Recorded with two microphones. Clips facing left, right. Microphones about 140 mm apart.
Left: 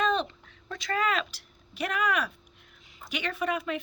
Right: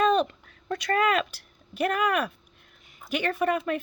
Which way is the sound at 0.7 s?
55° right (ahead or behind).